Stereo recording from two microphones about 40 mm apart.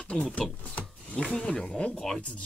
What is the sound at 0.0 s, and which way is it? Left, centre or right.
Speech, left.